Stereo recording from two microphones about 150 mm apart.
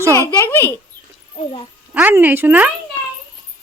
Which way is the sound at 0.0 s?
20° right (ahead or behind).